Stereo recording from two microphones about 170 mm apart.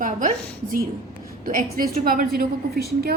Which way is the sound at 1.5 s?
55° right (ahead or behind).